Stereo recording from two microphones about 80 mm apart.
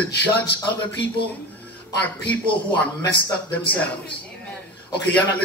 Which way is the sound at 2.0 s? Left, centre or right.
Centre.